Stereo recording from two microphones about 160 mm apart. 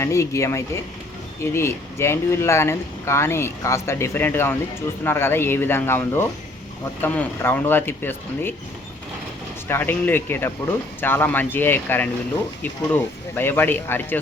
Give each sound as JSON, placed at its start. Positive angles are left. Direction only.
{"t": 0.0, "sound": "speech", "side_deg": 20}
{"t": 9.6, "sound": "speech", "side_deg": 15}